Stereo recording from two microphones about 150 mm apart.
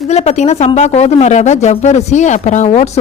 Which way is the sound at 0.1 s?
45° left (ahead or behind).